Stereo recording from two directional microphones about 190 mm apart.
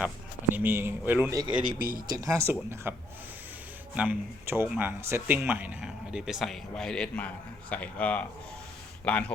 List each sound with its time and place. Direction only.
0.5 s speech: 10° right (ahead or behind)
1.8 s speech: 50° right (ahead or behind)
2.0 s speech: 20° right (ahead or behind)
3.9 s speech: 5° right (ahead or behind)